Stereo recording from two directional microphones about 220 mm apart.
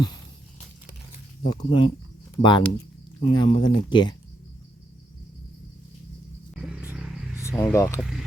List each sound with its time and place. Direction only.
1.5 s speech: 20° left (ahead or behind)
6.5 s vehicle: 5° right (ahead or behind)
7.6 s speech: 10° left (ahead or behind)